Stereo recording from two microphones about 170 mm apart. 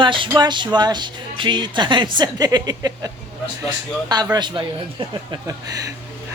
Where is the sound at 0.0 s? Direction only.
30° right (ahead or behind).